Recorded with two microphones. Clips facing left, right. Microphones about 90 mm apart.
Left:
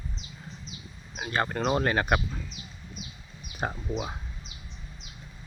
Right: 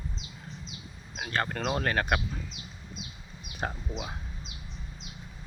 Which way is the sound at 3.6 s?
5° left (ahead or behind).